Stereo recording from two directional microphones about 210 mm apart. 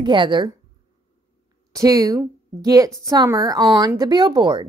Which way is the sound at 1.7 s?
15° right (ahead or behind).